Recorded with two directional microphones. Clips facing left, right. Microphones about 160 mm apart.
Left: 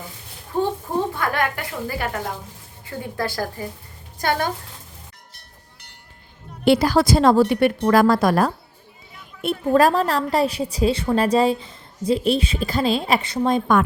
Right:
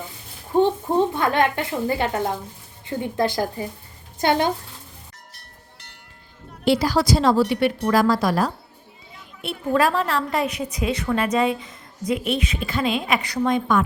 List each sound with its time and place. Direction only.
0.6 s a sound: 20° right (ahead or behind)
2.8 s a woman's voice: 20° right (ahead or behind)
6.7 s a woman's voice: 60° left (ahead or behind)
9.4 s a woman's voice: 45° left (ahead or behind)